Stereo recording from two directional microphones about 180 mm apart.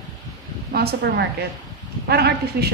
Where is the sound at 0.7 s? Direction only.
60° right (ahead or behind).